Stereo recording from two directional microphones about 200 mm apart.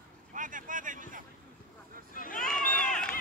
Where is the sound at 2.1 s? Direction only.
45° left (ahead or behind).